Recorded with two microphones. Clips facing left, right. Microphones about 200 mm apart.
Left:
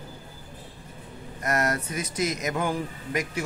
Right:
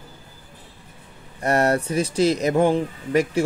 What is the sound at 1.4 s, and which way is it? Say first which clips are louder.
Speech: right 7 dB; 30° right (ahead or behind).